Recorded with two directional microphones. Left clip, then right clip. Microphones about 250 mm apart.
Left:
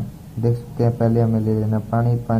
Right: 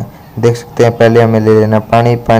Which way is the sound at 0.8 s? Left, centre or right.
Right.